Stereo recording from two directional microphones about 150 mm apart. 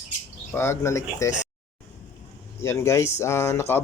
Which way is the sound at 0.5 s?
15° left (ahead or behind).